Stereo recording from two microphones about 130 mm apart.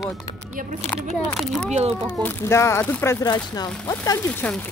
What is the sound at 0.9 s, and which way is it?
Speech, 5° left (ahead or behind).